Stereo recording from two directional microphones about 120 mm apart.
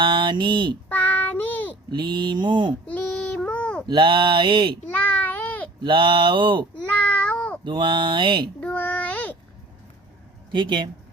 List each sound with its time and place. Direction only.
0.0 s speech: 45° right (ahead or behind)
0.9 s child singing: 15° left (ahead or behind)
1.9 s mantra: 40° right (ahead or behind)
2.8 s child singing: 10° left (ahead or behind)
3.8 s speech: 45° right (ahead or behind)
4.9 s a sound: 10° left (ahead or behind)
5.8 s speech: 45° right (ahead or behind)
6.8 s meow: 10° left (ahead or behind)
7.6 s speech: 40° right (ahead or behind)
8.6 s a sound: 10° left (ahead or behind)
10.5 s speech: 45° right (ahead or behind)